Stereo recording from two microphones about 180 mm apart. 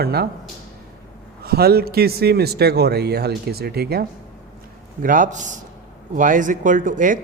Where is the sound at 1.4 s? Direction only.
60° right (ahead or behind).